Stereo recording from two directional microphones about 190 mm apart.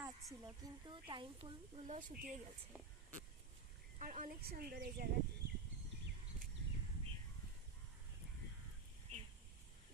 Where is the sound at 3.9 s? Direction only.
40° right (ahead or behind).